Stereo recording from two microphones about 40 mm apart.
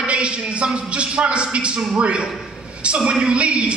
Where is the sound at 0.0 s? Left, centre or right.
Right.